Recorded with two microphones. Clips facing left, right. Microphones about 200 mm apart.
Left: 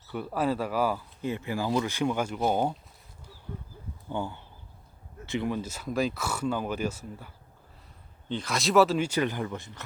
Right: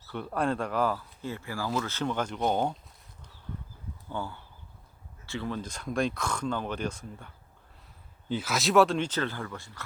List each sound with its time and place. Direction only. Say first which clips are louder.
0.1 s speech: left 1 dB; 5° left (ahead or behind)
4.1 s speech: left 3 dB; 20° left (ahead or behind)
8.3 s speech: even; 5° right (ahead or behind); by 9.8 s 20° left (ahead or behind)